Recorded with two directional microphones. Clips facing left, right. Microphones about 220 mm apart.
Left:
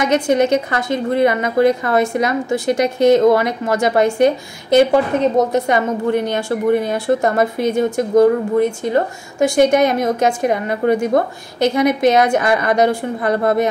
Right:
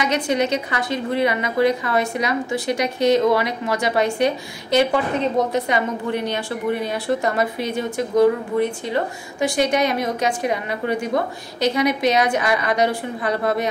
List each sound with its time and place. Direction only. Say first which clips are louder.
0.0 s a woman's voice: left 6 dB; 50° left (ahead or behind)